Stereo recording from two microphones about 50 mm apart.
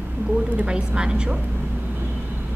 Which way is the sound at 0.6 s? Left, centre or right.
Centre.